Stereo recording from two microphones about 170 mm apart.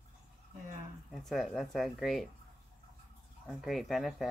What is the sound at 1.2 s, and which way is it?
Speech, centre (ahead or behind).